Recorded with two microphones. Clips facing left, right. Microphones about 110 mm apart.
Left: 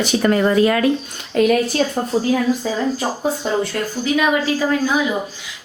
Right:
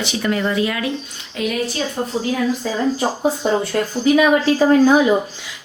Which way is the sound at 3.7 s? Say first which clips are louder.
Right 4 dB; 25° right (ahead or behind).